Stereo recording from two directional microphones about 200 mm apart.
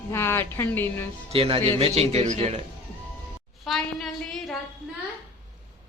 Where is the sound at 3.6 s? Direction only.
Centre (ahead or behind).